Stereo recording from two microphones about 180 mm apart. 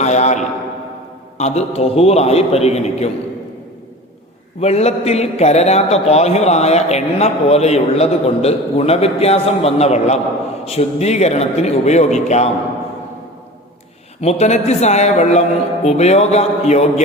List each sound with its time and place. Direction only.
0.0 s a man's voice: 40° left (ahead or behind)
4.6 s a man's voice: 35° left (ahead or behind)
14.2 s a man's voice: 35° left (ahead or behind)